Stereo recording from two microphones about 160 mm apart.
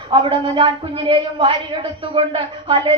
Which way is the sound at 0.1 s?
35° right (ahead or behind).